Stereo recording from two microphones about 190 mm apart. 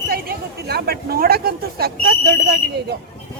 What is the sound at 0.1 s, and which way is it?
Speech, 55° right (ahead or behind).